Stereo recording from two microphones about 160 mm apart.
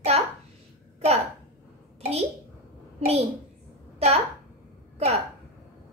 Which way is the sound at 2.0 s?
45° right (ahead or behind).